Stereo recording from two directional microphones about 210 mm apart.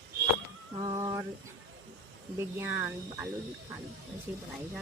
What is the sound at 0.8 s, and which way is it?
Speech, 20° right (ahead or behind).